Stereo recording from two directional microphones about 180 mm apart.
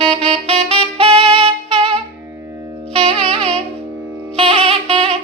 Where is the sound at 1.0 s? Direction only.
30° right (ahead or behind).